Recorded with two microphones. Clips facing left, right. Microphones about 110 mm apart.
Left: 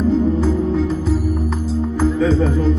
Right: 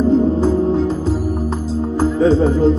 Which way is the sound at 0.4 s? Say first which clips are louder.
Right 3 dB; 35° right (ahead or behind).